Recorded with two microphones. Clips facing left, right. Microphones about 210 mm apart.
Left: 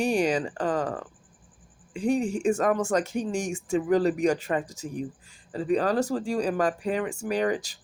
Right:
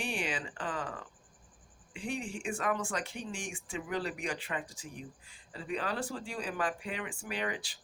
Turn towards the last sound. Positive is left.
turn(degrees=40)  # may be behind; listen again after turning